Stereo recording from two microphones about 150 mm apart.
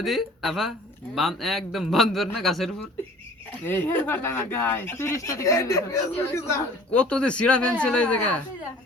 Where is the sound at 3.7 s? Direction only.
15° left (ahead or behind).